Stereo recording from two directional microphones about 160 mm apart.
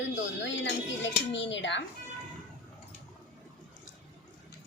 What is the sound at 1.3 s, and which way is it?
Speech, 90° left.